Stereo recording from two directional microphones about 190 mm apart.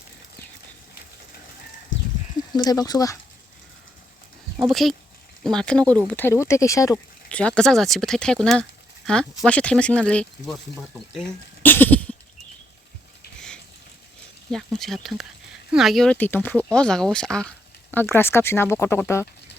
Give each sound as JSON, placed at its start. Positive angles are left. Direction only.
{"t": 2.6, "sound": "speech", "side_deg": 20}
{"t": 4.5, "sound": "speech", "side_deg": 0}
{"t": 7.3, "sound": "speech", "side_deg": 5}
{"t": 14.5, "sound": "speech", "side_deg": 0}